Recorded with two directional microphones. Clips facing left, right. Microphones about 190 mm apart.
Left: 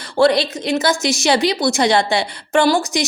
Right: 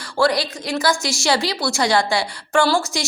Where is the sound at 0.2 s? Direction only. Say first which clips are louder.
Left 5 dB; 25° left (ahead or behind).